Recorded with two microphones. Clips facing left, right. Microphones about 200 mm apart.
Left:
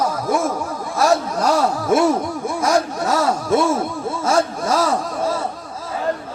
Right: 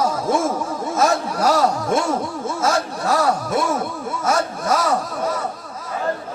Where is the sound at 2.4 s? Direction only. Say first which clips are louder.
Left 3 dB; 20° left (ahead or behind).